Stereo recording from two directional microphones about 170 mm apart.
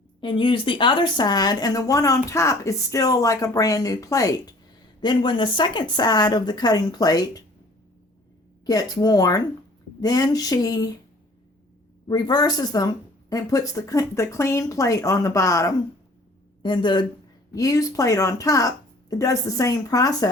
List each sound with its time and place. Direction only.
0.2 s speech: 30° left (ahead or behind)
8.6 s speech: 20° left (ahead or behind)
12.0 s speech: 25° left (ahead or behind)